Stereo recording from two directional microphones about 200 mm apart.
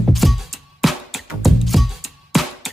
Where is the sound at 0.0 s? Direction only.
Centre (ahead or behind).